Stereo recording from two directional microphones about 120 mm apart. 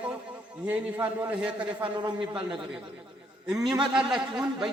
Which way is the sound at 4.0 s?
5° right (ahead or behind).